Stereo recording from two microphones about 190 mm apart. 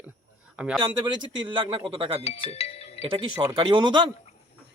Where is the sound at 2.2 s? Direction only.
30° left (ahead or behind).